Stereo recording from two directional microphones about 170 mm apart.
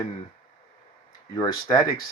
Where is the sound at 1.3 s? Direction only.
20° left (ahead or behind).